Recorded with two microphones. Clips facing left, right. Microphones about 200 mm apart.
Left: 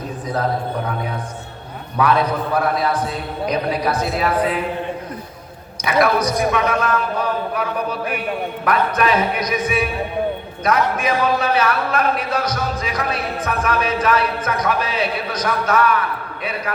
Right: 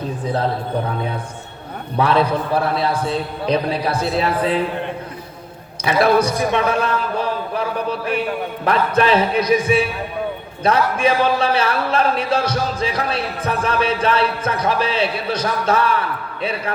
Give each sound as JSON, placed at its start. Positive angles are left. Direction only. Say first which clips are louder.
{"t": 2.0, "sound": "a man's voice", "louder": "right 1 dB", "side_deg": -30}
{"t": 5.8, "sound": "a man's voice", "louder": "right 2 dB", "side_deg": -30}